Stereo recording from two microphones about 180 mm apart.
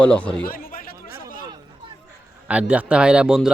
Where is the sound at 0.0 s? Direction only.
5° left (ahead or behind).